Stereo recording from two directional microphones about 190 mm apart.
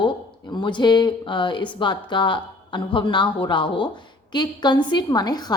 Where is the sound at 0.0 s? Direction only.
25° left (ahead or behind).